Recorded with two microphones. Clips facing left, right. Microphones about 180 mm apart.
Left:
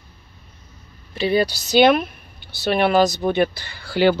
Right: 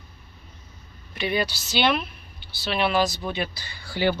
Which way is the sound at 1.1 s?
30° left (ahead or behind).